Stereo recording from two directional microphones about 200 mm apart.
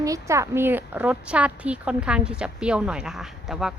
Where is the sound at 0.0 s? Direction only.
15° right (ahead or behind).